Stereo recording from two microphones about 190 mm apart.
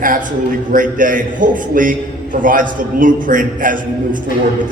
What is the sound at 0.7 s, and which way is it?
A man's voice, 45° right (ahead or behind).